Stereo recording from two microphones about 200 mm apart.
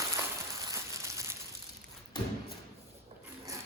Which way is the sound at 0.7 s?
15° right (ahead or behind).